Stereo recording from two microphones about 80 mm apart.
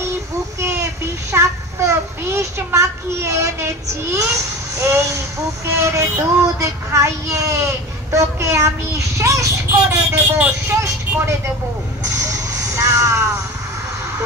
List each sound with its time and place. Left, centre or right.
0.6 s child singing: right
4.7 s speech: right
11.1 s vehicle: centre
12.3 s vehicle: right